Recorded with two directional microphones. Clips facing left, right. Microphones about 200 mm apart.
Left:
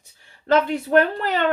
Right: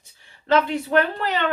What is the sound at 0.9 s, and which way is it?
Speech, 45° left (ahead or behind).